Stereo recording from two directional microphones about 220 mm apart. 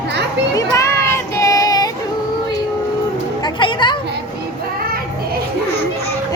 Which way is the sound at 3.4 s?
20° left (ahead or behind).